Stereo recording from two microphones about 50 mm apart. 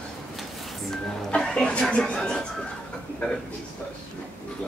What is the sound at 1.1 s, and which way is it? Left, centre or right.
Music, centre.